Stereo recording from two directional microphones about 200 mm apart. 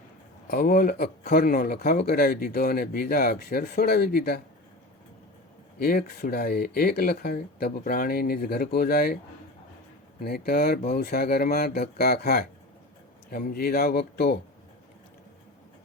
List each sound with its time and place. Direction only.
0.4 s speech: 50° left (ahead or behind)
5.8 s speech: 50° left (ahead or behind)
10.2 s speech: 50° left (ahead or behind)